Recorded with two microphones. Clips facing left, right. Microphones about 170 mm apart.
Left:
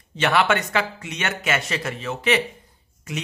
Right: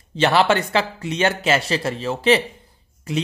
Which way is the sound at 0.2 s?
30° right (ahead or behind).